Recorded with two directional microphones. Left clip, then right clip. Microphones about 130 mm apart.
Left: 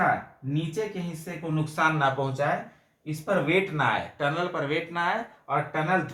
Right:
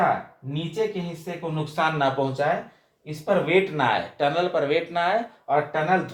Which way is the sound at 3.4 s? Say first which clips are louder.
Right 3 dB; 30° right (ahead or behind).